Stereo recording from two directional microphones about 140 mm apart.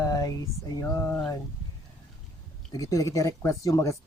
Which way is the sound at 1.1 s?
10° left (ahead or behind).